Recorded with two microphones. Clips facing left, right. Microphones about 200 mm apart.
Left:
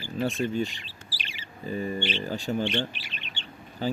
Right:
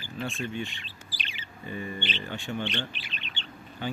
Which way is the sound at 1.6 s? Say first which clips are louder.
Left 5 dB; 40° left (ahead or behind).